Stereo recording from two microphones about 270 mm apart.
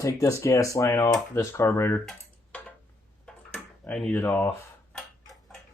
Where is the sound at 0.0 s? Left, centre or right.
Centre.